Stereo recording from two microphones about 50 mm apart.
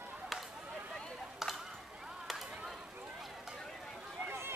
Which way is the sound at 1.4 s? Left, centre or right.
Centre.